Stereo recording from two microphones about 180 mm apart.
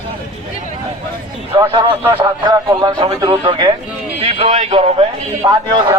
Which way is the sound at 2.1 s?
25° right (ahead or behind).